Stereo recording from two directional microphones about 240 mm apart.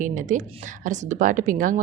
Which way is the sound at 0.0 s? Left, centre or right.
Right.